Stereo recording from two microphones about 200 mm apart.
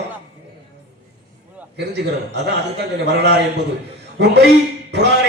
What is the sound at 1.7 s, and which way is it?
A man's voice, 55° right (ahead or behind).